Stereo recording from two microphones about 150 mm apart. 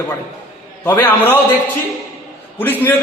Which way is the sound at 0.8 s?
15° left (ahead or behind).